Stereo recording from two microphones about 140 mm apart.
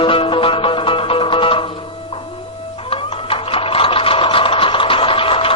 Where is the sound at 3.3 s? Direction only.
40° left (ahead or behind).